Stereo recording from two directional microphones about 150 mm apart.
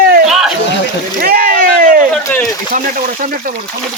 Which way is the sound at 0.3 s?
5° right (ahead or behind).